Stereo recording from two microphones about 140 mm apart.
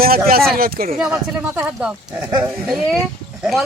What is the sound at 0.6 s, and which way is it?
Speech, 90° right.